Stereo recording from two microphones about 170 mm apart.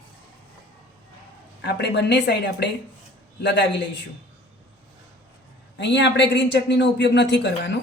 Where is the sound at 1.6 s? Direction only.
80° left.